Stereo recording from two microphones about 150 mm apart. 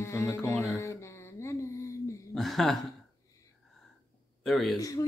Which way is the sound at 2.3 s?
Centre (ahead or behind).